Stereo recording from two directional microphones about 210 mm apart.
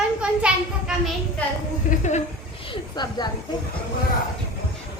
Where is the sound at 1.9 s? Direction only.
35° left (ahead or behind).